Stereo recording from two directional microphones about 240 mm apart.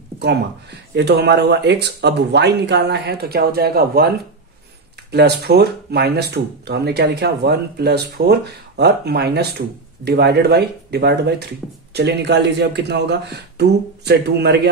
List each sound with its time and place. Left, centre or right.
0.2 s speech: right
5.1 s speech: right